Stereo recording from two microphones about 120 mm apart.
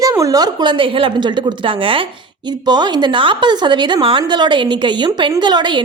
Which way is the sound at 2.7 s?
35° right (ahead or behind).